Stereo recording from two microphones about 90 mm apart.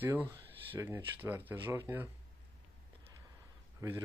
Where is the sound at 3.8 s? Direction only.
35° right (ahead or behind).